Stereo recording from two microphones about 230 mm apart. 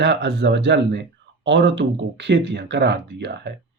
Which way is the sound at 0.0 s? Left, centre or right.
Right.